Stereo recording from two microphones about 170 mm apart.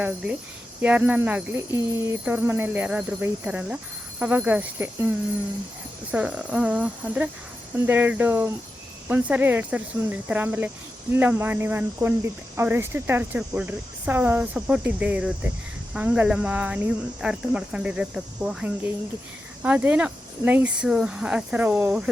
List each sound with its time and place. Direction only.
0.8 s speech: 5° right (ahead or behind)